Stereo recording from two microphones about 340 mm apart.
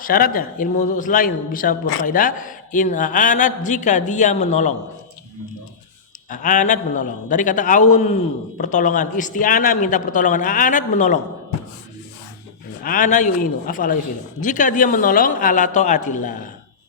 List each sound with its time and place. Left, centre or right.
0.0 s a man's voice: left
6.3 s a man's voice: left
12.8 s a man's voice: left